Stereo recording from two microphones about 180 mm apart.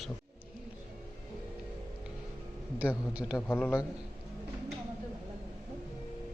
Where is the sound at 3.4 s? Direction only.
10° left (ahead or behind).